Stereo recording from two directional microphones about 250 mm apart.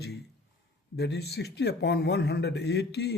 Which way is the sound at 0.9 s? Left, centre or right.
Left.